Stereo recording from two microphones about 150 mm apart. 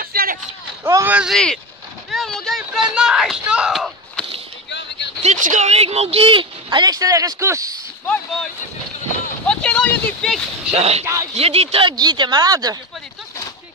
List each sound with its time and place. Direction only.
0.0 s run: 80° right
0.8 s speech: 20° right (ahead or behind)
1.1 s speech: 5° right (ahead or behind)
2.0 s a sound: 5° left (ahead or behind)
5.2 s a woman's voice: 55° right (ahead or behind); by 7.8 s 20° right (ahead or behind)
8.1 s speech: 5° left (ahead or behind)
9.5 s speech: 5° left (ahead or behind)
10.7 s speech: 45° right (ahead or behind)
12.0 s speech: 30° right (ahead or behind)